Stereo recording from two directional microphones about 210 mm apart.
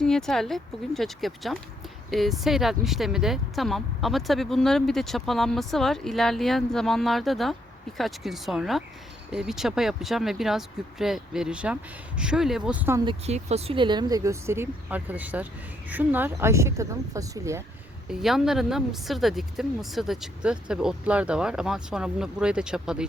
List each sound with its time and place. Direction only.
0.0 s speech: centre (ahead or behind)
13.1 s speech: 30° right (ahead or behind); by 17.6 s 15° right (ahead or behind)
18.1 s speech: centre (ahead or behind)